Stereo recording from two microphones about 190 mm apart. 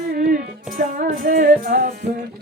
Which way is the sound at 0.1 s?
45° right (ahead or behind).